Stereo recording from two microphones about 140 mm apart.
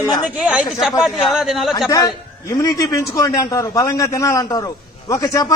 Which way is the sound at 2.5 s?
25° left (ahead or behind).